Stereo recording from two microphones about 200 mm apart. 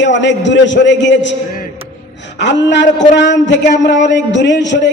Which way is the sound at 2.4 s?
60° left (ahead or behind).